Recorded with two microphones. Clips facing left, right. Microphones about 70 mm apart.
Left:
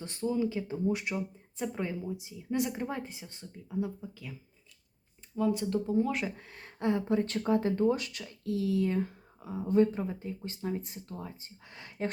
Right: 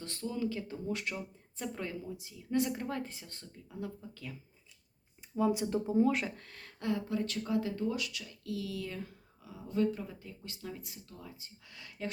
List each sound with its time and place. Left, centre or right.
0.0 s speech: centre
5.3 s speech: centre
6.3 s speech: centre; by 12.1 s left